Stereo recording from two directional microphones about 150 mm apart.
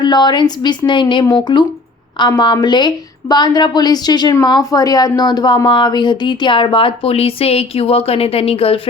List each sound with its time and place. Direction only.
0.0 s a woman's voice: 30° left (ahead or behind)